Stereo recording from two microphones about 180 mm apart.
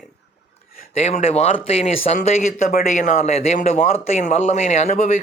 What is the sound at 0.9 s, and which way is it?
Speech, 35° left (ahead or behind).